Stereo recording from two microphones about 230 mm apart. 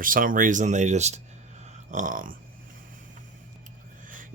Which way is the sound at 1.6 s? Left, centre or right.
Right.